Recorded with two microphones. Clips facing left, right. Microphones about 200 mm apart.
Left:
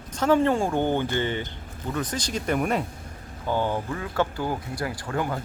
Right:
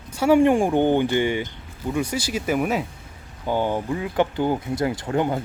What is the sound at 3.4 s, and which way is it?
Speech, 15° right (ahead or behind).